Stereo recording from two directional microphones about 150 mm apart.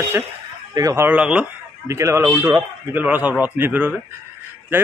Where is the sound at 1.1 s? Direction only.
5° right (ahead or behind).